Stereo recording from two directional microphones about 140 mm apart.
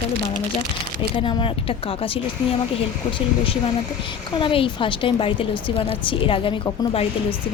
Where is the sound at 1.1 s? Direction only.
35° left (ahead or behind).